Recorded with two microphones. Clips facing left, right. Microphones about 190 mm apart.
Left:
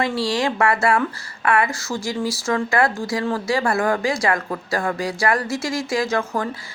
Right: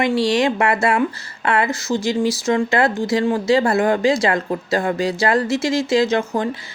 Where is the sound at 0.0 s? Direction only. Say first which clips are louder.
Right 4 dB; 20° right (ahead or behind).